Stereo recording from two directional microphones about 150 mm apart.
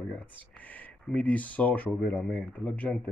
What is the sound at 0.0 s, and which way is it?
Speech, 10° left (ahead or behind).